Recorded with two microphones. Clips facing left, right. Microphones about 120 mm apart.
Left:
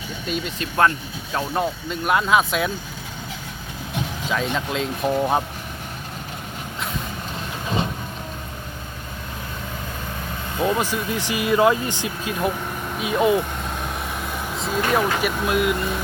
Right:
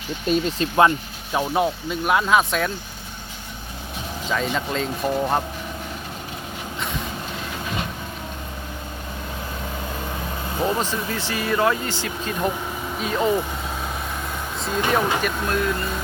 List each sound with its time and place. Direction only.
0.6 s speech: 20° right (ahead or behind)
1.4 s speech: 5° right (ahead or behind)
4.3 s speech: centre (ahead or behind)
7.7 s vehicle: 30° left (ahead or behind)
10.8 s speech: 10° left (ahead or behind)
14.6 s speech: centre (ahead or behind)